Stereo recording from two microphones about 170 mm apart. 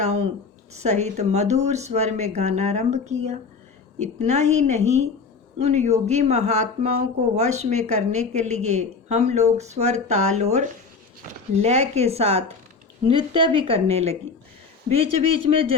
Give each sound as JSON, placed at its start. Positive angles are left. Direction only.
{"t": 0.0, "sound": "a woman's voice", "side_deg": -40}